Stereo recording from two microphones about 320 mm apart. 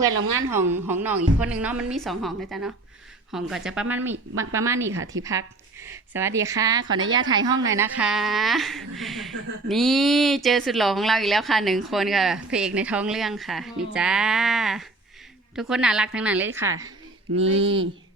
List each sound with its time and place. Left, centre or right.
0.5 s a woman's voice: centre